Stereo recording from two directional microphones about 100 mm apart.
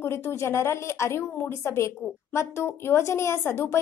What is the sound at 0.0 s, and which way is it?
A woman's voice, 25° left (ahead or behind).